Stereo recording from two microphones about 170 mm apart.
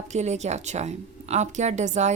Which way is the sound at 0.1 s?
40° right (ahead or behind).